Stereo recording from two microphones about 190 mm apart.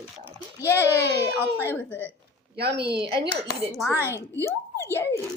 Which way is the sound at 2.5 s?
55° right (ahead or behind).